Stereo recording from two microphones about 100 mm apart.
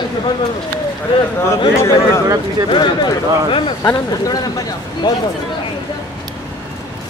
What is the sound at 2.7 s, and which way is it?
Speech, 50° left (ahead or behind).